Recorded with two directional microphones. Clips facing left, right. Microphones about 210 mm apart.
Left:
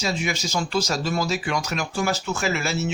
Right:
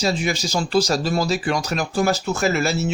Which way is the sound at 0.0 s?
35° right (ahead or behind).